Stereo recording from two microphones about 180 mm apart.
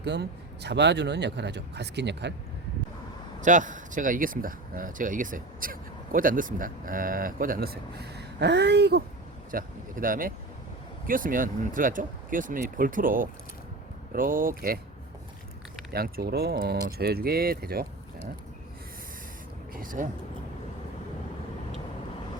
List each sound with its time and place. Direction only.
0.0 s speech: 70° right (ahead or behind)
3.4 s speech: 45° right (ahead or behind); by 9.0 s 65° right (ahead or behind)
9.5 s speech: 50° right (ahead or behind)
15.9 s speech: 60° right (ahead or behind)
19.7 s vehicle: 50° right (ahead or behind)